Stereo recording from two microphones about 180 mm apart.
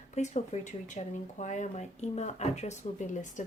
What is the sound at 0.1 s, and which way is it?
Speech, 40° left (ahead or behind).